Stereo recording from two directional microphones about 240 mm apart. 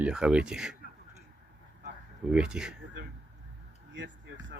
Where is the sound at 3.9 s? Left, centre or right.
Right.